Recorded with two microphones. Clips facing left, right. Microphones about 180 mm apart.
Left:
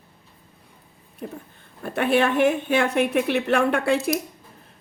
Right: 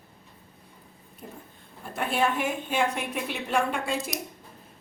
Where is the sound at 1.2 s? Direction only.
80° left.